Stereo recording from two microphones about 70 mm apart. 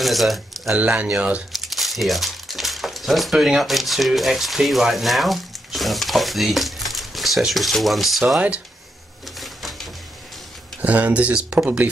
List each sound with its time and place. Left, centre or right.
0.0 s speech: centre
0.7 s speech: centre
1.5 s speech: centre
9.4 s printer: centre
10.8 s speech: right